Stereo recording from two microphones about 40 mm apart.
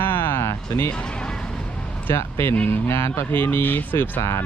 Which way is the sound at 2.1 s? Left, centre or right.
Left.